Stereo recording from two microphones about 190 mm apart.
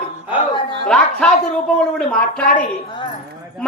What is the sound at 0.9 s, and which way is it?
A man's voice, 5° left (ahead or behind).